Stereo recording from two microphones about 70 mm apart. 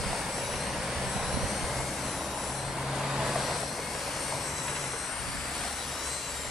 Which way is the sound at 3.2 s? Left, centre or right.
Centre.